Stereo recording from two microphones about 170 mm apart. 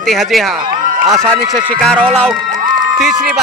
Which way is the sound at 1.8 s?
5° left (ahead or behind).